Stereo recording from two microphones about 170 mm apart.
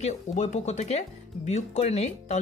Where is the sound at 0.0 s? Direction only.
40° left (ahead or behind).